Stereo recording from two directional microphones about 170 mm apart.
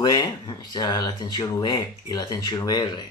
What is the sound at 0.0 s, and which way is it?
Speech, 25° left (ahead or behind).